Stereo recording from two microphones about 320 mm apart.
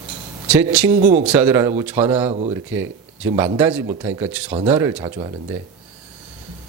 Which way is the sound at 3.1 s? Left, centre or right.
Centre.